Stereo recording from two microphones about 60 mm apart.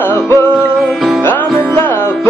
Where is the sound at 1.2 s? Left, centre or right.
Left.